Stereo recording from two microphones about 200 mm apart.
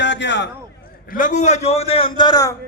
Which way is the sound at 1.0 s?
40° left (ahead or behind).